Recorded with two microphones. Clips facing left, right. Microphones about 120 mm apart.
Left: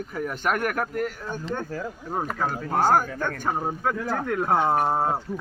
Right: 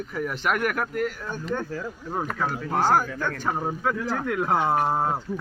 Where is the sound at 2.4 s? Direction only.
40° left (ahead or behind).